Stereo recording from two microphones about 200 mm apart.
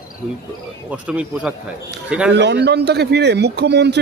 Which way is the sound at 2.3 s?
60° right (ahead or behind).